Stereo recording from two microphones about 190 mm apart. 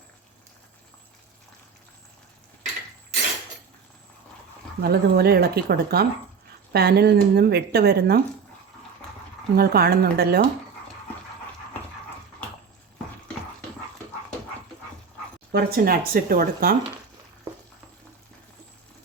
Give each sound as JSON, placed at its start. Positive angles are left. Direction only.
{"t": 4.8, "sound": "speech", "side_deg": -55}
{"t": 9.6, "sound": "speech", "side_deg": -55}
{"t": 15.5, "sound": "speech", "side_deg": -50}